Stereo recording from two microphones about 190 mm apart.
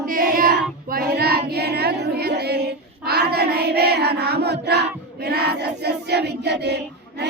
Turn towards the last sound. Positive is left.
turn(degrees=-60)  # may be behind; listen again after turning